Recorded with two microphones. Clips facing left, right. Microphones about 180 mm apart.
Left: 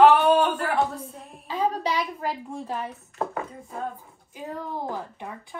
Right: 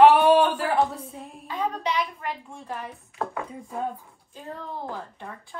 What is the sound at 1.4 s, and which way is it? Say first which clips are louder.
A woman's voice: left 3 dB; 35° left (ahead or behind).